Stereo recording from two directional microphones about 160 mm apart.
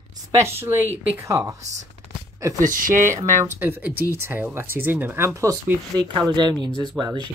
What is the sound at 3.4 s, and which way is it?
Speech, 10° right (ahead or behind).